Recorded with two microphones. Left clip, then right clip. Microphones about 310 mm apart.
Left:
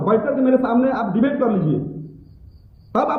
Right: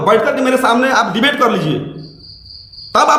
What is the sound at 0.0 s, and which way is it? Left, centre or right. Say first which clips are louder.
A man's voice: right 6 dB; right.